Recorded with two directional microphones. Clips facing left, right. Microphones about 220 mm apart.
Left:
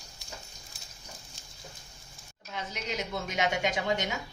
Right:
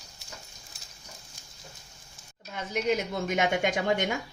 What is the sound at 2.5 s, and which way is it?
A woman's voice, 50° right (ahead or behind).